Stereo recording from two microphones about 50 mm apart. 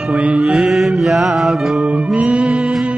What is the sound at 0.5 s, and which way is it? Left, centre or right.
Mantra, centre.